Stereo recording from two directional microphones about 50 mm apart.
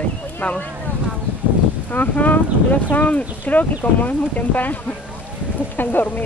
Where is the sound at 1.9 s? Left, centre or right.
Left.